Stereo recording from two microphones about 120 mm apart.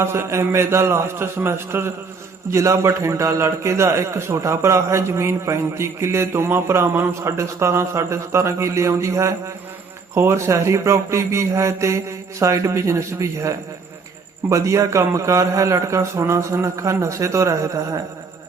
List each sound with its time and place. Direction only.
0.0 s a man's voice: 20° right (ahead or behind)